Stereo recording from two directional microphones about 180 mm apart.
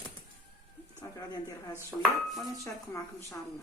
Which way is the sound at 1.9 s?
5° right (ahead or behind).